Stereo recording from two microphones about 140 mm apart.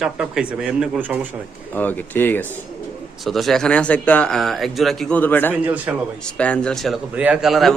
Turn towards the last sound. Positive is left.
turn(degrees=0)  # may be behind; listen again after turning